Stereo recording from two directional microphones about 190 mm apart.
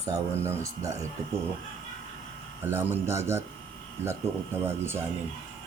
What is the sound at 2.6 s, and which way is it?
Speech, 10° right (ahead or behind).